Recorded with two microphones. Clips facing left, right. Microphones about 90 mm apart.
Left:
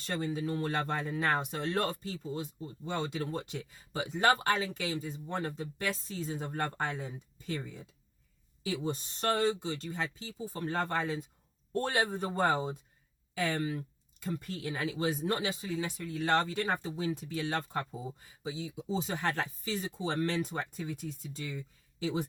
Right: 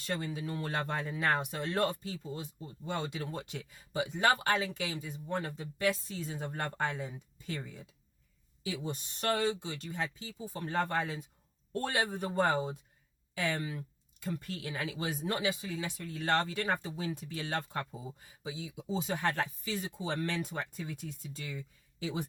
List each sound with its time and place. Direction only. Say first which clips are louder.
0.0 s speech: left 3 dB; 30° left (ahead or behind)